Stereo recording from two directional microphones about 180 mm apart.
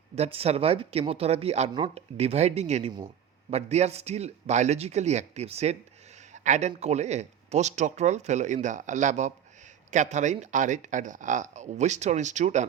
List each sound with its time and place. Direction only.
0.2 s speech: 35° right (ahead or behind)